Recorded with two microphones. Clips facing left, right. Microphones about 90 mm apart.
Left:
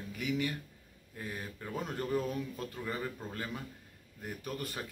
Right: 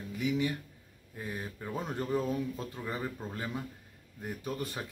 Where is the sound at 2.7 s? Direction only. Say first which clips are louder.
Right 1 dB; 10° right (ahead or behind).